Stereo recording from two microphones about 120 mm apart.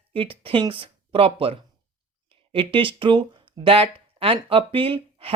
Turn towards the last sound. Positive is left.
turn(degrees=-50)  # may be behind; listen again after turning